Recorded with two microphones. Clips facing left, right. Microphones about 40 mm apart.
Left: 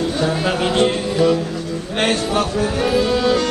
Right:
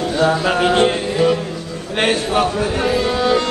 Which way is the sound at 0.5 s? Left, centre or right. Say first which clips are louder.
Right 2 dB; centre.